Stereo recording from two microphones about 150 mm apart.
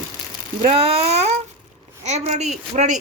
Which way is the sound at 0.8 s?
40° right (ahead or behind).